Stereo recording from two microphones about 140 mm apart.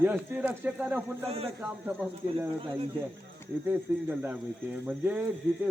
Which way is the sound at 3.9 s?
15° right (ahead or behind).